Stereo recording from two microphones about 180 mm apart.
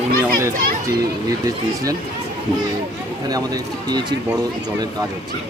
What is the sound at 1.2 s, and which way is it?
Speech, 20° right (ahead or behind).